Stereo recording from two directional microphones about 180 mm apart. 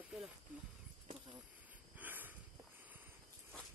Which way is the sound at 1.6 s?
10° right (ahead or behind).